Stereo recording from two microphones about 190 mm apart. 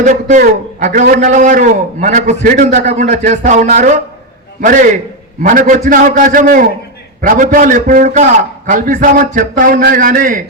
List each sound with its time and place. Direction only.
0.0 s a man's voice: 40° right (ahead or behind)